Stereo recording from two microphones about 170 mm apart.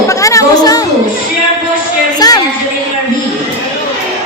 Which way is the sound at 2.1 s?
20° left (ahead or behind).